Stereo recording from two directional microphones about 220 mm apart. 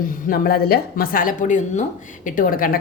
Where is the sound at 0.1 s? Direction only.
40° left (ahead or behind).